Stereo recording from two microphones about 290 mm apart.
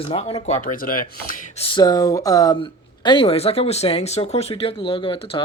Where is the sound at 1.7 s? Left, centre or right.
Centre.